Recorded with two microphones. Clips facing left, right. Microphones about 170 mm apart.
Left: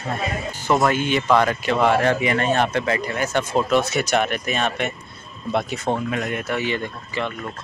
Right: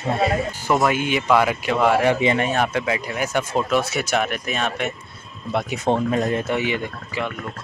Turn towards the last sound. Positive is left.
turn(degrees=-10)  # may be behind; listen again after turning